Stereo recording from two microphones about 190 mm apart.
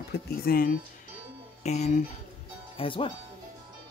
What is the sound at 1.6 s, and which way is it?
Speech, 35° left (ahead or behind).